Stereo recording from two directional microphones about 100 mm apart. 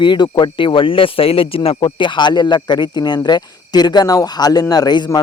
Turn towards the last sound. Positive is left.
turn(degrees=45)  # may be behind; listen again after turning